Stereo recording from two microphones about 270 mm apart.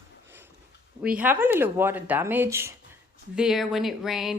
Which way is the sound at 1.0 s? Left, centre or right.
Centre.